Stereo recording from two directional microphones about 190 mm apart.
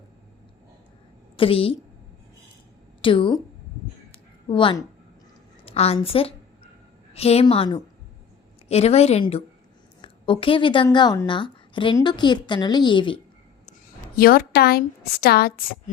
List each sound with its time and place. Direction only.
1.4 s a woman's voice: 30° left (ahead or behind)
3.0 s a woman's voice: 25° left (ahead or behind)
4.4 s a woman's voice: 25° left (ahead or behind)
14.2 s a woman's voice: 50° left (ahead or behind)